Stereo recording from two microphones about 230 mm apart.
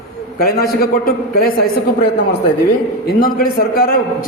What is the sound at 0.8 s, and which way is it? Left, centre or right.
Speech, left.